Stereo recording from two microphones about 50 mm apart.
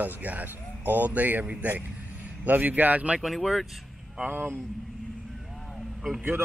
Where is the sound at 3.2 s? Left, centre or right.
Centre.